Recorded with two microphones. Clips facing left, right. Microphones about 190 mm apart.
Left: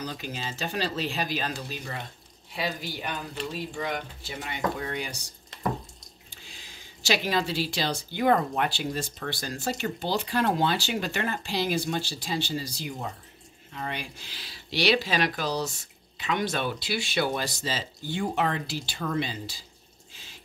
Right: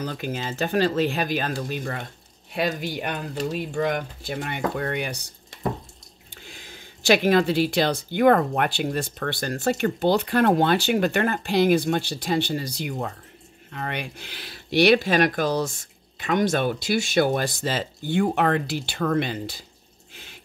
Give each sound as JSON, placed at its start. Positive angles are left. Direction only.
{"t": 0.0, "sound": "speech", "side_deg": -55}
{"t": 6.3, "sound": "speech", "side_deg": -55}